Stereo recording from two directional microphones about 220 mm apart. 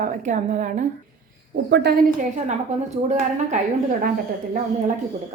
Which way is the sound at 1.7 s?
50° right (ahead or behind).